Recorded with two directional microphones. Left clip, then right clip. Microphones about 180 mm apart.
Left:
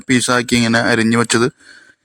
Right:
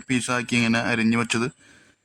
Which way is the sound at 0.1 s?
30° left (ahead or behind).